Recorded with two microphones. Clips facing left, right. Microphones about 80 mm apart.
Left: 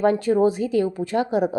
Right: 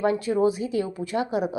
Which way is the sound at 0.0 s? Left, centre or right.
Left.